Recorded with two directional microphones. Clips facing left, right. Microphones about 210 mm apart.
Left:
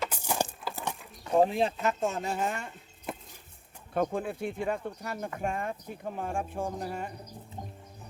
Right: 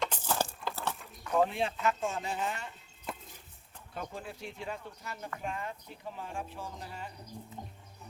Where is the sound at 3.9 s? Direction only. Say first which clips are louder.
Left 12 dB; 55° left (ahead or behind).